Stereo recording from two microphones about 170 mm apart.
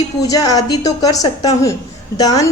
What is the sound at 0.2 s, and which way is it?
A woman's voice, 20° left (ahead or behind).